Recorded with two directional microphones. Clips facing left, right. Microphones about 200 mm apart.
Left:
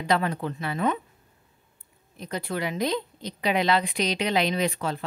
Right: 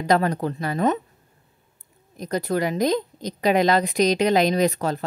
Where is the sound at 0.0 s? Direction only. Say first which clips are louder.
Right 5 dB; 40° right (ahead or behind).